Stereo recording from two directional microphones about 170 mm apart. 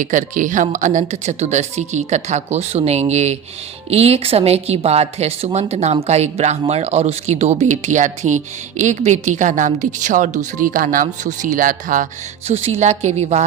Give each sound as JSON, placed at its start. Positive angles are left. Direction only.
{"t": 0.0, "sound": "a woman's voice", "side_deg": -50}
{"t": 12.5, "sound": "a woman's voice", "side_deg": -40}